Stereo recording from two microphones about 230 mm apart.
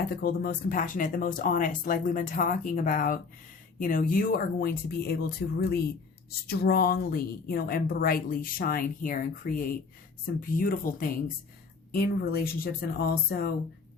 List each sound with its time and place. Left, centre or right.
0.1 s a woman's voice: left